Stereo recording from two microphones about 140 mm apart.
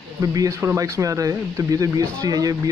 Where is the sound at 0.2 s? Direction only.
25° right (ahead or behind).